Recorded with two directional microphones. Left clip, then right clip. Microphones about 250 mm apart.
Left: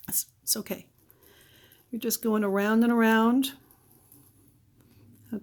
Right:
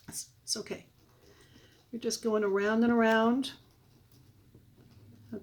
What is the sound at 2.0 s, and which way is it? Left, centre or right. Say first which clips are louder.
Speech: left 2 dB; left.